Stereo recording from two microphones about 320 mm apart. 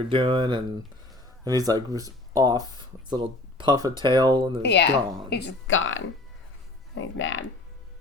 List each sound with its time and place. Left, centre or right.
0.1 s speech: centre
4.6 s speech: left